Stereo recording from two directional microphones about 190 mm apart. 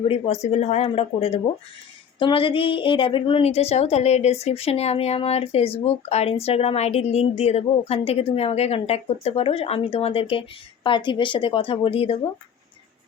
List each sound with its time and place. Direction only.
0.1 s a woman's voice: 35° left (ahead or behind)